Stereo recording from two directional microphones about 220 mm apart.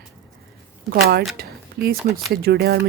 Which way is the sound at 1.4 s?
45° right (ahead or behind).